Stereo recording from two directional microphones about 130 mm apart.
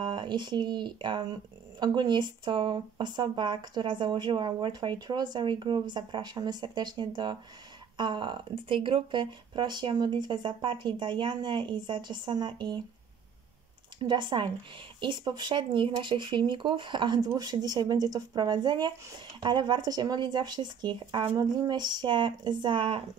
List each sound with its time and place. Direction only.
0.0 s speech: 35° right (ahead or behind)
14.0 s speech: 35° right (ahead or behind)